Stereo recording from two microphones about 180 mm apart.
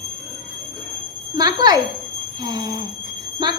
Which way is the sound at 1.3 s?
20° right (ahead or behind).